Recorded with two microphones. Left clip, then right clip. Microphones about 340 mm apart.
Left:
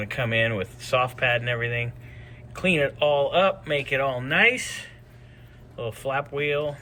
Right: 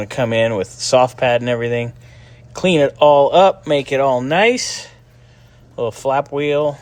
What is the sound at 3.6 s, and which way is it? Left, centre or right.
Speech, centre.